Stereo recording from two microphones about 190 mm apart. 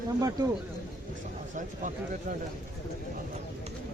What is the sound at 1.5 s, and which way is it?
Speech, 40° right (ahead or behind).